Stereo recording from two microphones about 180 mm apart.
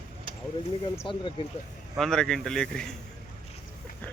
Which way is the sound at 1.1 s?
30° left (ahead or behind).